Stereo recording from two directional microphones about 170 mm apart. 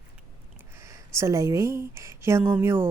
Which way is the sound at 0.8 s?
15° right (ahead or behind).